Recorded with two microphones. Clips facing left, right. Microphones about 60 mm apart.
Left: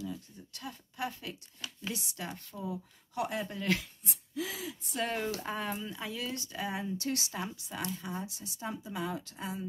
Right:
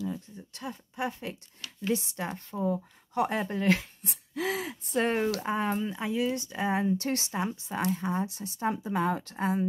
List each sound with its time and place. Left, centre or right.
0.0 s a woman's voice: right
4.0 s speech: right
5.4 s speech: right
7.3 s a woman's voice: right